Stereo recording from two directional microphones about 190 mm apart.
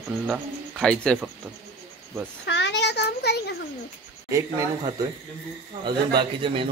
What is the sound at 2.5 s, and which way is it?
Speech, 65° left (ahead or behind).